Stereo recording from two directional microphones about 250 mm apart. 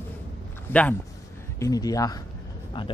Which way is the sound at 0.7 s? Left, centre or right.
Centre.